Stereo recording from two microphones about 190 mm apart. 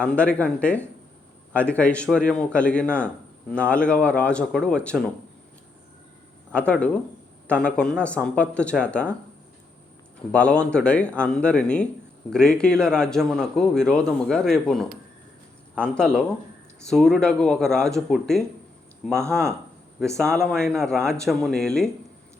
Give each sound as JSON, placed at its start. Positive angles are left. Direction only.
{"t": 0.0, "sound": "a man's voice", "side_deg": 5}
{"t": 6.5, "sound": "a man's voice", "side_deg": 5}
{"t": 10.3, "sound": "a man's voice", "side_deg": 5}
{"t": 20.0, "sound": "a man's voice", "side_deg": 5}